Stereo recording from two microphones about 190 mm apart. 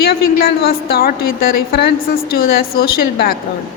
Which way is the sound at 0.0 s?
55° left (ahead or behind).